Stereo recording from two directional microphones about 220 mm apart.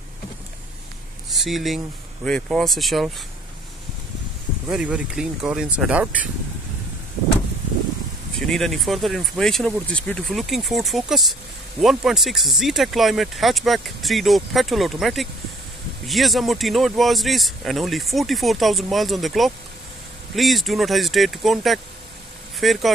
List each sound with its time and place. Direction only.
1.3 s speech: centre (ahead or behind)
4.6 s speech: 5° right (ahead or behind)
8.4 s speech: centre (ahead or behind)